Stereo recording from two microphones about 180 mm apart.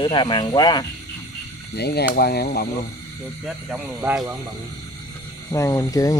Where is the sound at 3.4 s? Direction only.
5° right (ahead or behind).